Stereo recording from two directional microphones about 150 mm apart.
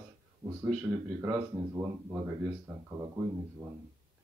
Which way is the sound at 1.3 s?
20° right (ahead or behind).